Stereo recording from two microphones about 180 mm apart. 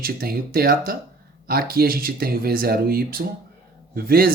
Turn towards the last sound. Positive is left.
turn(degrees=-55)  # may be behind; listen again after turning